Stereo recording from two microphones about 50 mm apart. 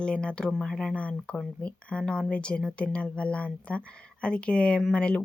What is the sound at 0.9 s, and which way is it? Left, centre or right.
Speech, left.